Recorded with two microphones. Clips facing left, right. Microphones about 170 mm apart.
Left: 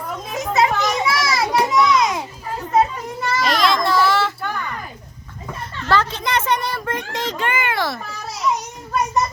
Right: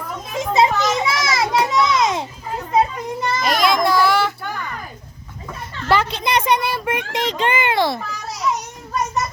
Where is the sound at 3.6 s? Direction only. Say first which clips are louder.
Right 2 dB; centre (ahead or behind).